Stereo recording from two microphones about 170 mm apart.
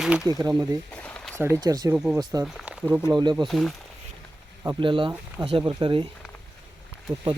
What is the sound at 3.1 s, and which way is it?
Speech, 25° right (ahead or behind).